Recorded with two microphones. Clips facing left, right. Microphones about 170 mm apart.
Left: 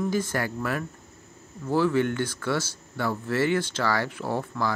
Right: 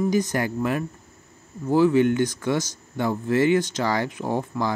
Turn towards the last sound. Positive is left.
turn(degrees=-15)  # may be behind; listen again after turning